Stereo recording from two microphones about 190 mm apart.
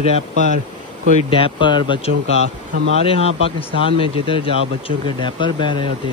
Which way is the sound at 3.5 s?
30° left (ahead or behind).